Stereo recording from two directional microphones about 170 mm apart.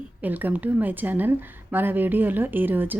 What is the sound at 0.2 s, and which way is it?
A woman's voice, 10° right (ahead or behind).